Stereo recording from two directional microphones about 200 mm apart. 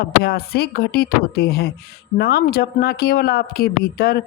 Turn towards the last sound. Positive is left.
turn(degrees=50)  # may be behind; listen again after turning